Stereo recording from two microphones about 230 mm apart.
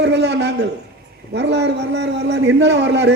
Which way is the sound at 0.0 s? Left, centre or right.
Right.